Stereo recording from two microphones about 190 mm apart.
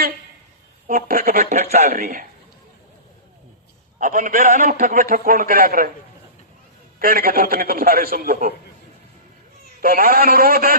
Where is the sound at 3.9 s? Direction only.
45° right (ahead or behind).